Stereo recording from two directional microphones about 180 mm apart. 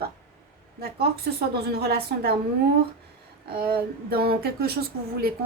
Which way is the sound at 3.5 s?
55° right (ahead or behind).